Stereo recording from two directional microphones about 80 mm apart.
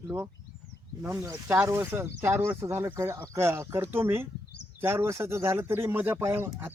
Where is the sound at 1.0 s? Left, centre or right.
Right.